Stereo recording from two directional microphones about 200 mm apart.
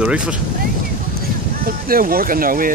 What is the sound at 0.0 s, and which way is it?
Speech, 5° right (ahead or behind).